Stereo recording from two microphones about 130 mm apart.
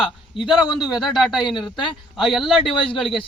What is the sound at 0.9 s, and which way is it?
Speech, centre (ahead or behind).